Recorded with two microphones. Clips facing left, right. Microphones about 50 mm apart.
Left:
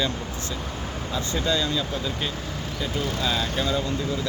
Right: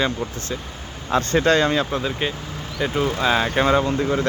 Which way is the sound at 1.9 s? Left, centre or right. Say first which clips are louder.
Right 5 dB; right.